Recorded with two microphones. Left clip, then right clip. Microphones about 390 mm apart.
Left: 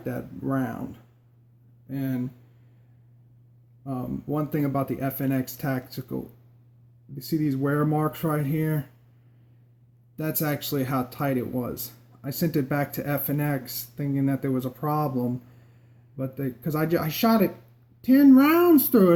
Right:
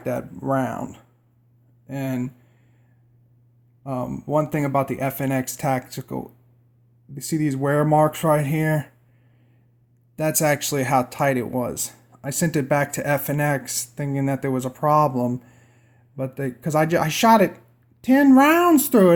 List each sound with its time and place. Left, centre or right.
0.0 s speech: right
1.9 s speech: right
3.8 s speech: right
7.2 s speech: right
10.2 s speech: right
16.1 s speech: right